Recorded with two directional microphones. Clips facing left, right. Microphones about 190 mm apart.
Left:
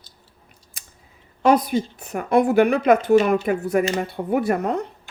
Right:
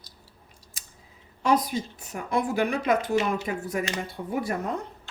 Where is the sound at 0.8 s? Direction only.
55° left (ahead or behind).